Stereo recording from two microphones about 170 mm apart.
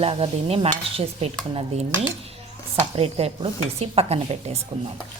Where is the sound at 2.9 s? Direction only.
35° right (ahead or behind).